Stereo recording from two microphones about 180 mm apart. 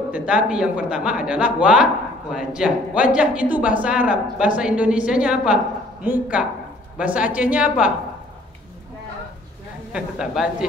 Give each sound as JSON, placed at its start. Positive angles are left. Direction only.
{"t": 0.1, "sound": "a man's voice", "side_deg": -5}
{"t": 9.9, "sound": "a man's voice", "side_deg": -5}